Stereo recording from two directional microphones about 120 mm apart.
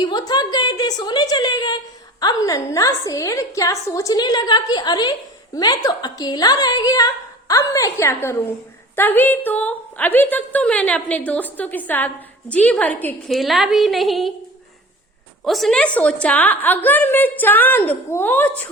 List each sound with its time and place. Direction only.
0.0 s a woman's voice: 35° left (ahead or behind); by 13.1 s 15° left (ahead or behind)
13.2 s a woman's voice: centre (ahead or behind)
15.4 s a woman's voice: centre (ahead or behind)